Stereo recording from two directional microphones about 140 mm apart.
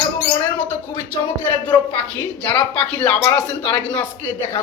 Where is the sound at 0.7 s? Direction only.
15° left (ahead or behind).